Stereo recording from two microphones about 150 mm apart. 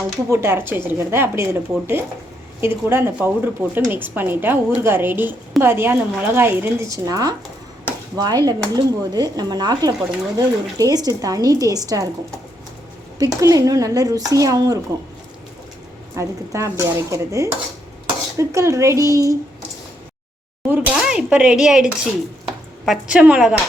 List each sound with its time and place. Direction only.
0.3 s a woman's voice: 15° right (ahead or behind)
13.3 s speech: 20° right (ahead or behind)
16.1 s speech: 20° right (ahead or behind)
20.7 s speech: 5° right (ahead or behind)
22.9 s speech: 5° right (ahead or behind)